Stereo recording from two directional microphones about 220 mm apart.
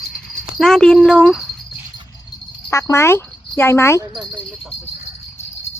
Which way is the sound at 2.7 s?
10° left (ahead or behind).